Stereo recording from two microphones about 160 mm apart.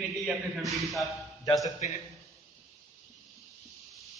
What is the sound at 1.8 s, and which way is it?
Speech, 50° left (ahead or behind).